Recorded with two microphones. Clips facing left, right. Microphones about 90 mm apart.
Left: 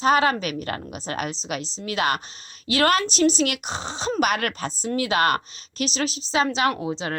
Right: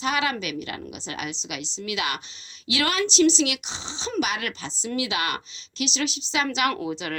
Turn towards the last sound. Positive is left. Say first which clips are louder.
# left 2 dB
turn(degrees=30)  # may be behind; listen again after turning